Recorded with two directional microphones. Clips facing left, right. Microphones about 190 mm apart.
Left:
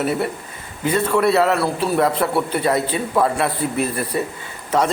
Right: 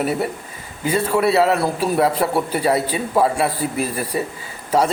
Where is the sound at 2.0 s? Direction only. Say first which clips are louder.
Right 1 dB; 10° right (ahead or behind).